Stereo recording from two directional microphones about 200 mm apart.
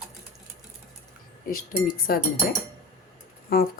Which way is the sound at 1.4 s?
45° left (ahead or behind).